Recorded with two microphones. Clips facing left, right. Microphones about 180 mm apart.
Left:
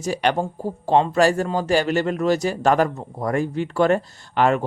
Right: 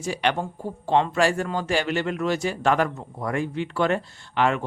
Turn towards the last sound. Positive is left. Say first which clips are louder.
# left 4 dB
turn(degrees=40)  # may be behind; listen again after turning